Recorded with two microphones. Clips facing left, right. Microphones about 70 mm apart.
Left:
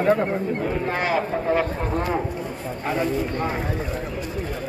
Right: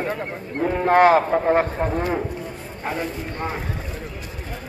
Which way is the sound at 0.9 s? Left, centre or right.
Right.